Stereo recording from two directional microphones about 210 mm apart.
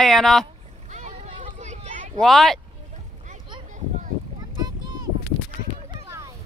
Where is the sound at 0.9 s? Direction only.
35° right (ahead or behind).